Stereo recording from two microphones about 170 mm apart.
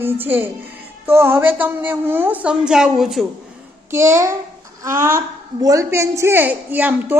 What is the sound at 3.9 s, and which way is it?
A woman's voice, 15° right (ahead or behind).